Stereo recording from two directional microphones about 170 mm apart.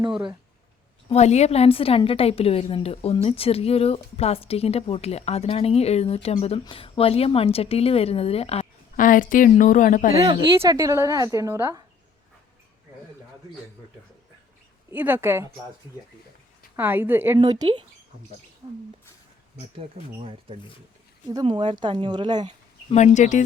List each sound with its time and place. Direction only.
1.1 s a woman's voice: 40° left (ahead or behind)
9.0 s a woman's voice: 50° left (ahead or behind)
10.6 s a woman's voice: 20° right (ahead or behind)
14.8 s speech: 10° right (ahead or behind)
16.7 s a woman's voice: 10° right (ahead or behind)
17.4 s speech: 25° right (ahead or behind)
20.2 s speech: 30° right (ahead or behind)
22.9 s a woman's voice: 45° left (ahead or behind)